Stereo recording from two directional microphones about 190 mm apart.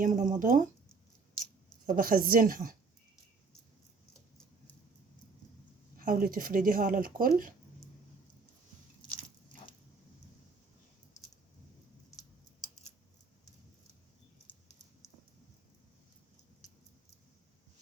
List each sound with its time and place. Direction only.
0.0 s speech: 40° right (ahead or behind)
1.9 s speech: 50° right (ahead or behind)
6.0 s speech: 45° right (ahead or behind)